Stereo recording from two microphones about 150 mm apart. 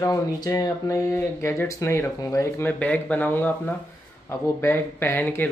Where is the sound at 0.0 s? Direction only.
25° left (ahead or behind).